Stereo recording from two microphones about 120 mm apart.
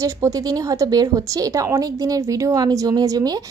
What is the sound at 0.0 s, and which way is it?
Speech, 30° right (ahead or behind).